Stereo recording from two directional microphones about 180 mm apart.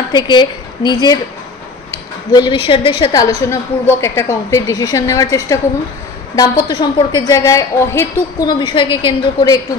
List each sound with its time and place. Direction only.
0.1 s a woman's voice: 25° left (ahead or behind)